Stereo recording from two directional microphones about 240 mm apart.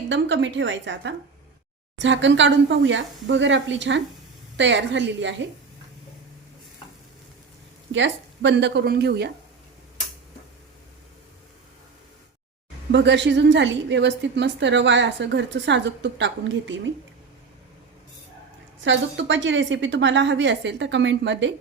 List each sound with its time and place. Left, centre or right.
0.1 s a woman's voice: right
7.9 s a woman's voice: right
12.9 s a woman's voice: right
18.9 s a woman's voice: right